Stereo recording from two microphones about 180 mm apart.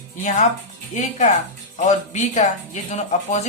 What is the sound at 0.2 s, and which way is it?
Speech, 45° left (ahead or behind).